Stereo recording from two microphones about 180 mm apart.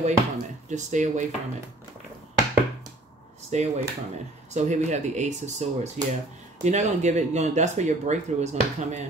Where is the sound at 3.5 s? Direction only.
40° right (ahead or behind).